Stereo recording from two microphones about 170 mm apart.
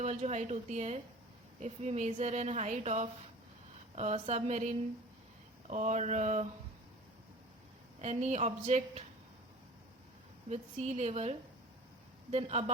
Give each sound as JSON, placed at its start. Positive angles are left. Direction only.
{"t": 0.0, "sound": "speech", "side_deg": -40}
{"t": 8.0, "sound": "speech", "side_deg": -40}
{"t": 10.5, "sound": "speech", "side_deg": -40}